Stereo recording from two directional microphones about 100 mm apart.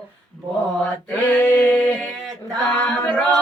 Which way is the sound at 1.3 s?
15° left (ahead or behind).